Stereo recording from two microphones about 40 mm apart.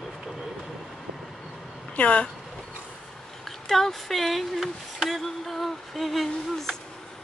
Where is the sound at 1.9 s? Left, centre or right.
Left.